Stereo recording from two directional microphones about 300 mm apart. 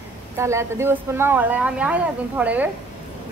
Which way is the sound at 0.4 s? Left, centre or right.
Centre.